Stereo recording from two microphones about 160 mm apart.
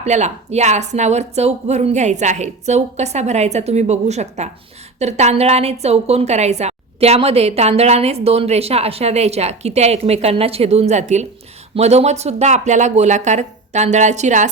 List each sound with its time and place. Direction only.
0.0 s a woman's voice: 45° right (ahead or behind)